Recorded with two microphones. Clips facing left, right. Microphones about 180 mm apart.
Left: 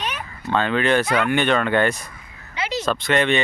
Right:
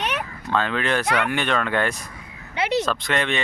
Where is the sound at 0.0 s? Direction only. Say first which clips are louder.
Right 3 dB; 65° right (ahead or behind).